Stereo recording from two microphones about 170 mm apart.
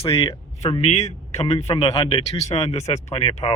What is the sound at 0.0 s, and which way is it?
A man's voice, 30° left (ahead or behind).